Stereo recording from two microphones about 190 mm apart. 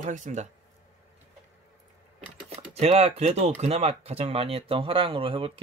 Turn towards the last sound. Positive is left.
turn(degrees=-30)  # may be behind; listen again after turning